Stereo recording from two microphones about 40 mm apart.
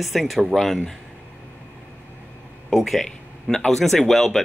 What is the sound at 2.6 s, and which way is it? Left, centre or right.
Speech, centre.